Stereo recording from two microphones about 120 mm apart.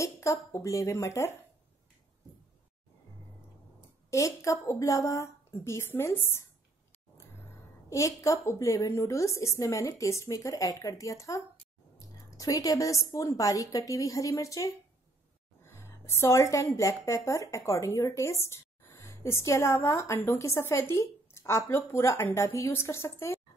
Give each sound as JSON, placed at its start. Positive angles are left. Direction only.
{"t": 0.0, "sound": "a woman's voice", "side_deg": 25}
{"t": 4.1, "sound": "a woman's voice", "side_deg": 25}
{"t": 7.9, "sound": "a woman's voice", "side_deg": 25}